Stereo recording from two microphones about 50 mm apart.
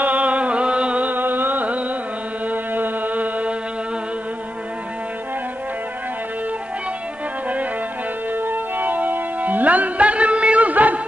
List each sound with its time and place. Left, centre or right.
0.0 s music: right
1.0 s music: right
8.4 s music: right